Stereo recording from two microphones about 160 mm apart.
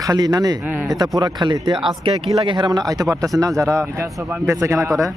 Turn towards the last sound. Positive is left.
turn(degrees=-20)  # may be behind; listen again after turning